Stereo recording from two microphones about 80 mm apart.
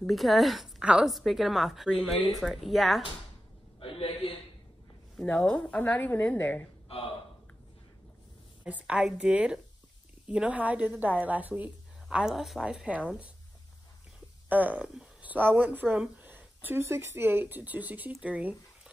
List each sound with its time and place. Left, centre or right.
0.0 s a woman's voice: centre
5.2 s a woman's voice: centre
8.6 s a woman's voice: centre
14.5 s a sound: centre
15.3 s speech: right